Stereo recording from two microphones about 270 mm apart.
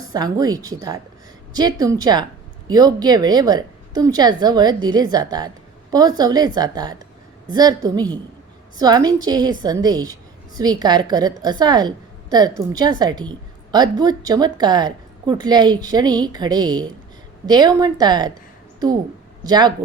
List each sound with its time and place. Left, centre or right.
0.1 s a woman's voice: centre
19.5 s a woman's voice: centre